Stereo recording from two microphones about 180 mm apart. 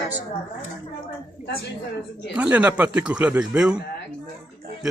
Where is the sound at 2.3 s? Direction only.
5° right (ahead or behind).